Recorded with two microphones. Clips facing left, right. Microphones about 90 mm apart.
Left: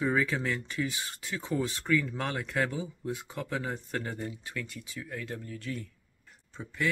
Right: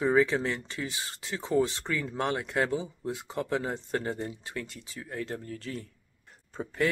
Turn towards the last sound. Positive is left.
turn(degrees=-40)  # may be behind; listen again after turning